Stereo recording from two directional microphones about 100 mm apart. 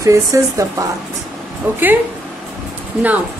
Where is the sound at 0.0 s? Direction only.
30° right (ahead or behind).